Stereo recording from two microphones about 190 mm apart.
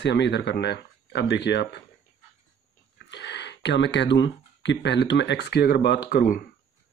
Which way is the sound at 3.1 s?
65° left (ahead or behind).